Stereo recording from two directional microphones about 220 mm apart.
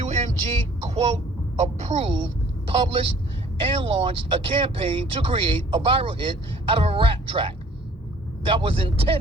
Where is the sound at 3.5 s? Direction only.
25° right (ahead or behind).